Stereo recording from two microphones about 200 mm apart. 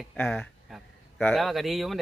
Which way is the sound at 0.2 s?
5° left (ahead or behind).